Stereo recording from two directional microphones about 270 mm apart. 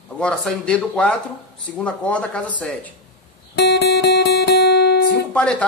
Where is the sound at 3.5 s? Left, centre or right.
Left.